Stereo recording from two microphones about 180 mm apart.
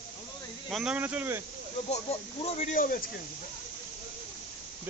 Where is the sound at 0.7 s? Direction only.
Centre (ahead or behind).